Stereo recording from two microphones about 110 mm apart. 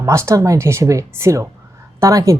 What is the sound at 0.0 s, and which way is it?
Speech, 25° right (ahead or behind).